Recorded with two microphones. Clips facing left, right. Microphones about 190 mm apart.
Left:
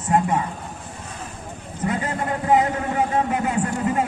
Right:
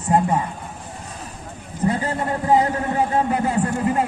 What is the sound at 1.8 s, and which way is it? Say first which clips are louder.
A man's voice: right 2 dB; 30° right (ahead or behind).